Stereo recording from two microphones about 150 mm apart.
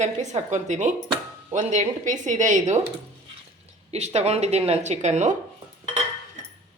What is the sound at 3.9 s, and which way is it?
A woman's voice, 45° right (ahead or behind).